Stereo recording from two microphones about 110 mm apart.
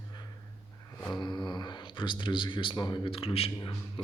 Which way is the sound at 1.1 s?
45° left (ahead or behind).